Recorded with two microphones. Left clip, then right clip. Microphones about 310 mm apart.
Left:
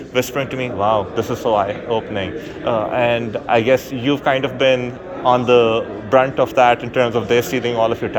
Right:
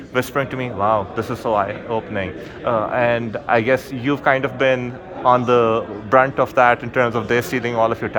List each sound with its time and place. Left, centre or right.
0.1 s a man's voice: centre